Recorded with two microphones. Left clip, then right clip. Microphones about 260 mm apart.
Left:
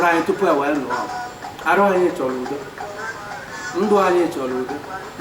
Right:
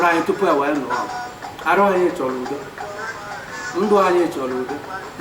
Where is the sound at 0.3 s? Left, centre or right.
Centre.